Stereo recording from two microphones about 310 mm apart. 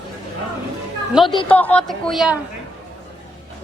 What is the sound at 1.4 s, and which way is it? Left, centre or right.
Speech, centre.